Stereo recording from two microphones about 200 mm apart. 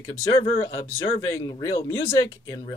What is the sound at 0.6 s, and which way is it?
Speech, 15° left (ahead or behind).